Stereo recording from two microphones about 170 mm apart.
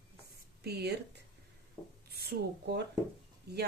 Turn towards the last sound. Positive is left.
turn(degrees=-70)  # may be behind; listen again after turning